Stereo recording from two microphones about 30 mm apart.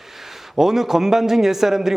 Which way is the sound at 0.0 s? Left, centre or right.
Centre.